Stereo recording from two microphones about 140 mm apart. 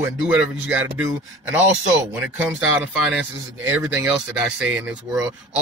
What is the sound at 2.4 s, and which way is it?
A man's voice, 10° right (ahead or behind).